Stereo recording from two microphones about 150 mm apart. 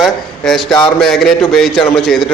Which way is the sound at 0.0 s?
Centre (ahead or behind).